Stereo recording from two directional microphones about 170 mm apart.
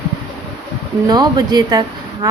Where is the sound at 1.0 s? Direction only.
25° right (ahead or behind).